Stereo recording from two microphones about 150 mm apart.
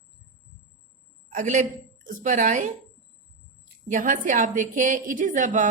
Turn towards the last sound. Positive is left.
turn(degrees=-60)  # may be behind; listen again after turning